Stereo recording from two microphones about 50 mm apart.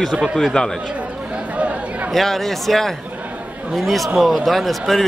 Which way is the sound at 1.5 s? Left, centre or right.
Right.